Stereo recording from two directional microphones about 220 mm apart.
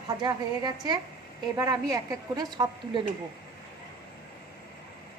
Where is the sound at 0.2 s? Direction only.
20° right (ahead or behind).